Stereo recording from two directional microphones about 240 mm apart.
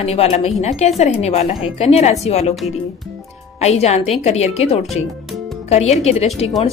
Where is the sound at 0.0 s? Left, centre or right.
Left.